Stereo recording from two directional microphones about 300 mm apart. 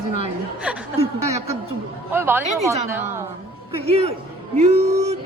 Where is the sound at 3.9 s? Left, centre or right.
Centre.